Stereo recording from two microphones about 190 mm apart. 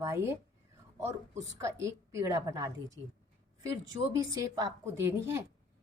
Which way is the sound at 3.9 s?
20° right (ahead or behind).